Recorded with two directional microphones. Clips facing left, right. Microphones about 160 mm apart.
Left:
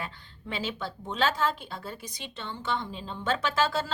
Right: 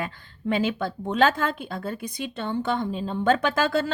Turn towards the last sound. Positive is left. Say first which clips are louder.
# right 4 dB
turn(degrees=-55)  # may be behind; listen again after turning